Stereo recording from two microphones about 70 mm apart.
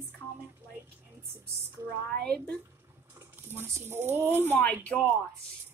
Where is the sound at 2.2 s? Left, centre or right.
Centre.